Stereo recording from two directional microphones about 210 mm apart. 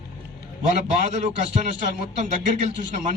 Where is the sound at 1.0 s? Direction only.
35° right (ahead or behind).